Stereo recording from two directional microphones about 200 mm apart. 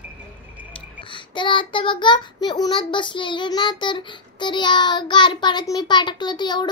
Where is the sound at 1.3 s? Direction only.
25° left (ahead or behind).